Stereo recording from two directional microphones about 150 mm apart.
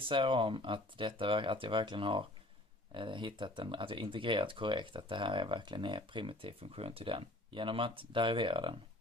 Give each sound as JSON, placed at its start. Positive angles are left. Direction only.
{"t": 0.0, "sound": "speech", "side_deg": -35}